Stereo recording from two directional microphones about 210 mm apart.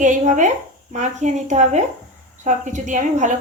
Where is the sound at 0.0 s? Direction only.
35° right (ahead or behind).